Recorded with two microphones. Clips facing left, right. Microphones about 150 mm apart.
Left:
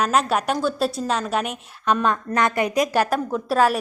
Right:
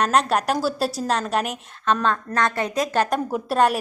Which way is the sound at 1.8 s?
15° left (ahead or behind).